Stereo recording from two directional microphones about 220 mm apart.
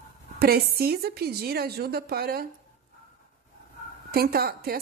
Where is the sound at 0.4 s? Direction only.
45° right (ahead or behind).